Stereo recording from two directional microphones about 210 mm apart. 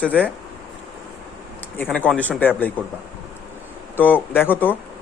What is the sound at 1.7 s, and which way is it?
Speech, 10° left (ahead or behind).